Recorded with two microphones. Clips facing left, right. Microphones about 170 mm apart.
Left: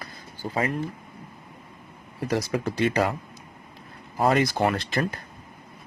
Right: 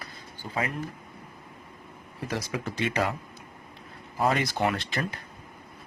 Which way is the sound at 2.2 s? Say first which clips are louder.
Left 6 dB; 40° left (ahead or behind).